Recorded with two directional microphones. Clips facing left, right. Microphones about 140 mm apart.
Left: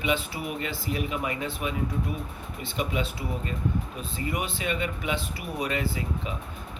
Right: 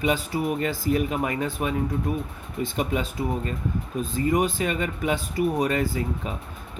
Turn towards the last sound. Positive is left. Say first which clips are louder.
# right 4 dB
turn(degrees=-45)  # may be behind; listen again after turning